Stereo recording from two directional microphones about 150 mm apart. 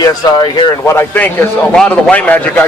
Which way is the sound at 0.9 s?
15° left (ahead or behind).